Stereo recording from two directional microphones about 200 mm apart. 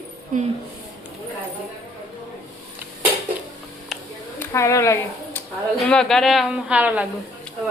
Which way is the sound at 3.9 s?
Centre (ahead or behind).